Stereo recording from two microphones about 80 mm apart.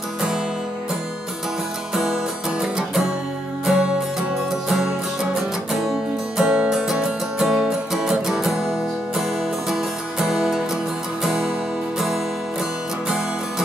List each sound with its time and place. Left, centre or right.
3.6 s music: centre